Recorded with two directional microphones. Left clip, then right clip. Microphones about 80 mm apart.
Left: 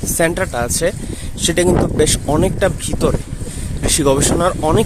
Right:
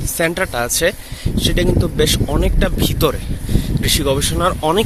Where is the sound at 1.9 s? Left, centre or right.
Left.